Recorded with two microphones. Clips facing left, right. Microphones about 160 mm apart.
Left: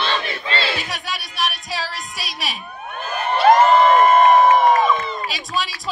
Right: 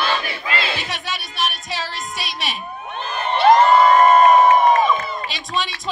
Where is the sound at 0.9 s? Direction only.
Centre (ahead or behind).